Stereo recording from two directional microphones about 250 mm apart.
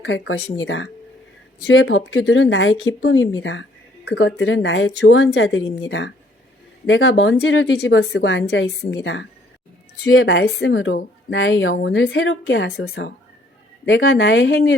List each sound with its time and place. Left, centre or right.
0.0 s a woman's voice: left